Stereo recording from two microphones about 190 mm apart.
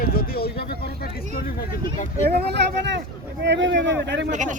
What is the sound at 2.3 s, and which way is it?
Speech, 60° right (ahead or behind).